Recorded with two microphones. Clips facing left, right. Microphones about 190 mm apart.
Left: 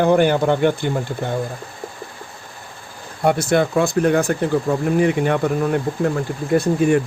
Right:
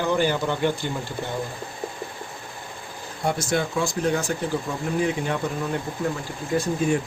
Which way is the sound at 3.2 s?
60° left (ahead or behind).